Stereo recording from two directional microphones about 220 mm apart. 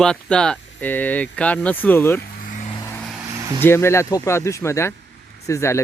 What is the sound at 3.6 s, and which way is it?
Speech, 10° left (ahead or behind).